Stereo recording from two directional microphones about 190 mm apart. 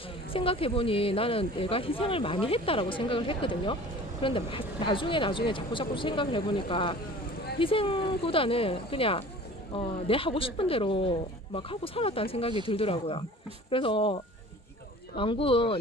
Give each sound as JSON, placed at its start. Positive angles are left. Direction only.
{"t": 0.3, "sound": "speech", "side_deg": 30}